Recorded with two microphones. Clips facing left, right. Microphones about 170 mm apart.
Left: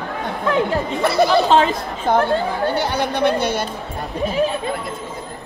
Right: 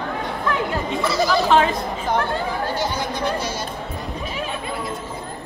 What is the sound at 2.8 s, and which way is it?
Speech, 65° left (ahead or behind).